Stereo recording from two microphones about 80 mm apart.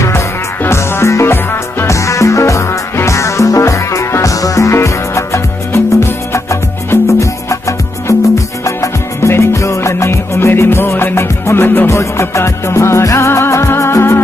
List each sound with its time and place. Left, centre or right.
0.0 s music: left
11.9 s music: left